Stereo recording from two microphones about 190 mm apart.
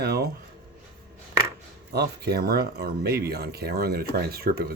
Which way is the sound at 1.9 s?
60° right (ahead or behind).